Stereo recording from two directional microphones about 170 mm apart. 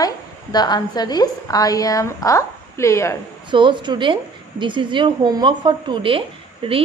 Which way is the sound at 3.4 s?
30° right (ahead or behind).